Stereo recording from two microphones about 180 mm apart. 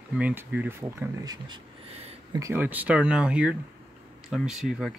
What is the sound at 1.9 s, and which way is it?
Speech, 35° right (ahead or behind).